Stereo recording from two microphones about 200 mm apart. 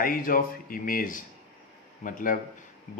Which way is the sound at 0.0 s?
45° left (ahead or behind).